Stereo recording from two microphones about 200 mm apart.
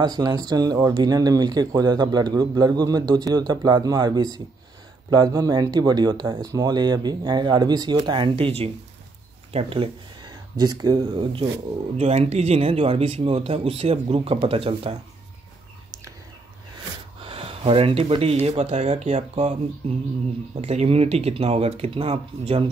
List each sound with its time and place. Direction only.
0.0 s speech: 20° right (ahead or behind)
12.0 s speech: 30° right (ahead or behind)
17.2 s speech: 30° right (ahead or behind)
20.6 s speech: 30° right (ahead or behind)